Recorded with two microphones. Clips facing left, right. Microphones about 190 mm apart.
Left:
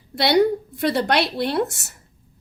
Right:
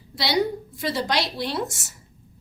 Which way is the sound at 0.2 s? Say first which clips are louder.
Left 6 dB; 60° left (ahead or behind).